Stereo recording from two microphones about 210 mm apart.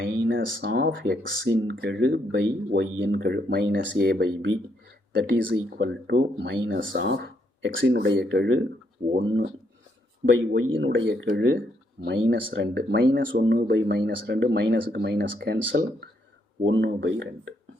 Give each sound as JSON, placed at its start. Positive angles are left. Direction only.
{"t": 0.0, "sound": "speech", "side_deg": -45}
{"t": 10.5, "sound": "speech", "side_deg": -65}